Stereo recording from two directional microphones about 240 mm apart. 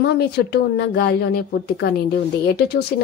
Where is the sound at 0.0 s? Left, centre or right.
Left.